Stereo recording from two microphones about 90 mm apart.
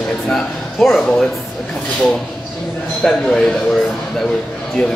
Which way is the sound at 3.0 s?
10° left (ahead or behind).